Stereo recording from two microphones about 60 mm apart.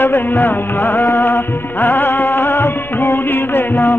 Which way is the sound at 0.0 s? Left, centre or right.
Left.